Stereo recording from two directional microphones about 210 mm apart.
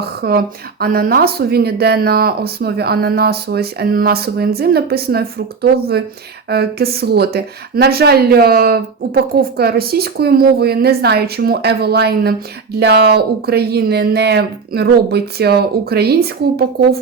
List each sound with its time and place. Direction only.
0.0 s speech: 45° right (ahead or behind)